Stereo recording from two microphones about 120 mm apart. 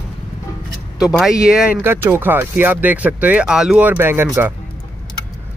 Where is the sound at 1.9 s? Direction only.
15° right (ahead or behind).